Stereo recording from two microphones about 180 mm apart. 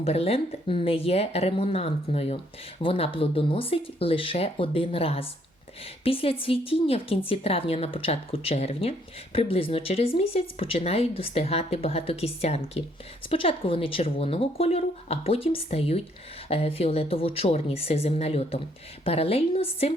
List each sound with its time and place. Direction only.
0.0 s speech: 35° left (ahead or behind)